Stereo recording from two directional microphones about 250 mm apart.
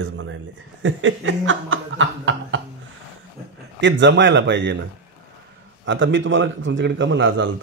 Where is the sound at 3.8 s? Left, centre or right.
Right.